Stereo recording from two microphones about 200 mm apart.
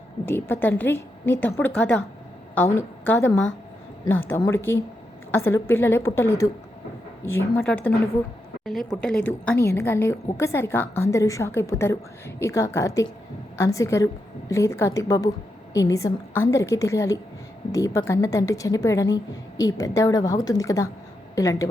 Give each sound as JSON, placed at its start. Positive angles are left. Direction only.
{"t": 0.3, "sound": "a woman's voice", "side_deg": 10}